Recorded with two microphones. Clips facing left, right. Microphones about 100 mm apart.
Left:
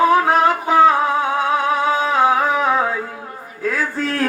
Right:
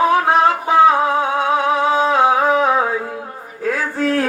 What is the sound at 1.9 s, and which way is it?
Music, 25° right (ahead or behind).